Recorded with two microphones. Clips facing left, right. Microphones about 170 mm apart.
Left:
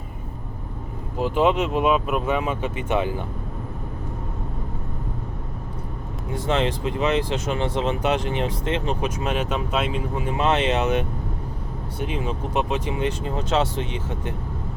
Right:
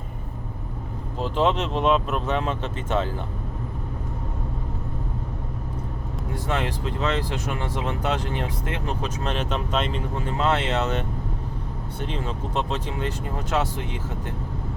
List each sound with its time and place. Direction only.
1.2 s speech: 10° left (ahead or behind)
6.3 s speech: 20° left (ahead or behind)